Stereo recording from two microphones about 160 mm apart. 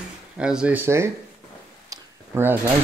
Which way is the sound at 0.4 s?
5° right (ahead or behind).